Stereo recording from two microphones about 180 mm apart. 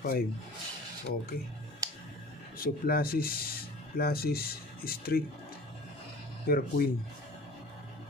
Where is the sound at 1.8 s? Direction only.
20° right (ahead or behind).